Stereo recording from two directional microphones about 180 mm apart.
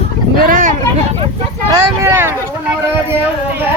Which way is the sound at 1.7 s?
15° right (ahead or behind).